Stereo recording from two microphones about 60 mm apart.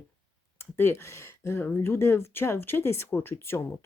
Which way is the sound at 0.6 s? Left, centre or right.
Left.